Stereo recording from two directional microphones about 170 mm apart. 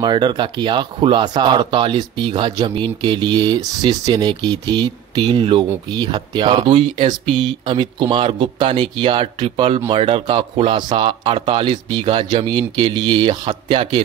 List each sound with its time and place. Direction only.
0.0 s speech: 25° right (ahead or behind)